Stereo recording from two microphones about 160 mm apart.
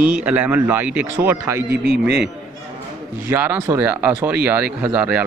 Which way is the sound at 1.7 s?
90° right.